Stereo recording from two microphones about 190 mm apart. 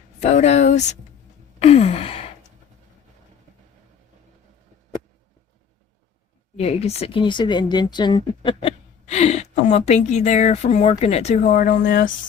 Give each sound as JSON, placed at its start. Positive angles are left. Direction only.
{"t": 0.2, "sound": "speech", "side_deg": 35}
{"t": 1.5, "sound": "gasp", "side_deg": 35}
{"t": 6.6, "sound": "speech", "side_deg": 35}